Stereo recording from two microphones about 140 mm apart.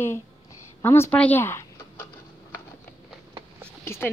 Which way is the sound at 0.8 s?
20° left (ahead or behind).